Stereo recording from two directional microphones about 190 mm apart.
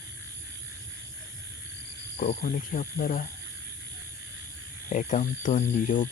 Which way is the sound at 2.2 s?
40° left (ahead or behind).